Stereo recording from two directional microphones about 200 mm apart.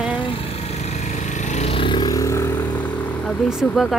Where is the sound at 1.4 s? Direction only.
30° left (ahead or behind); by 2.5 s 15° left (ahead or behind).